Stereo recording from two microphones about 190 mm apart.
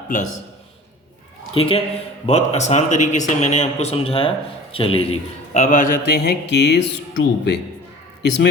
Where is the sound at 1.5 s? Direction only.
30° left (ahead or behind).